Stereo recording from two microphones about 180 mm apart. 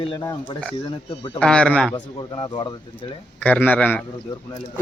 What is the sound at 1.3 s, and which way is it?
Speech, 5° left (ahead or behind).